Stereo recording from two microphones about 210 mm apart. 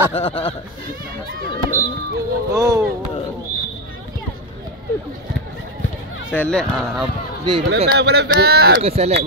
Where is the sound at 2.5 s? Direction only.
15° right (ahead or behind).